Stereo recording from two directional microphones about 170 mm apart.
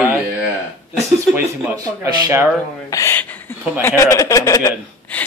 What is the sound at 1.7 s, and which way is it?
Speech, 20° right (ahead or behind).